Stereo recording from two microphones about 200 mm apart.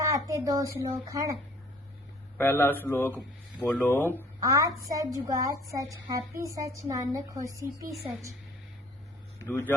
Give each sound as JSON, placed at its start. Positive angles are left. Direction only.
{"t": 0.3, "sound": "a woman's voice", "side_deg": -15}
{"t": 2.4, "sound": "speech", "side_deg": 10}
{"t": 4.2, "sound": "a woman's voice", "side_deg": -15}
{"t": 9.4, "sound": "speech", "side_deg": 10}